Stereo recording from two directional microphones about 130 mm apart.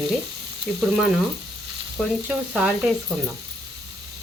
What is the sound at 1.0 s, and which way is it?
Sizzle, centre (ahead or behind).